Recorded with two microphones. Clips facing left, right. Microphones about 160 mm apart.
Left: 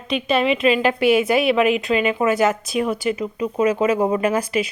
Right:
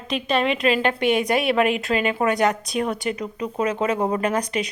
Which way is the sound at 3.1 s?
35° right (ahead or behind).